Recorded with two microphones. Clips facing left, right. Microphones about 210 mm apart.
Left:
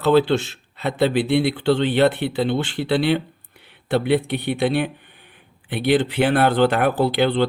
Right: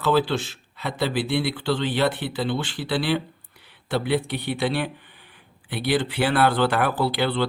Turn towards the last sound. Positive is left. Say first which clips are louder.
# left 5 dB
turn(degrees=50)  # may be behind; listen again after turning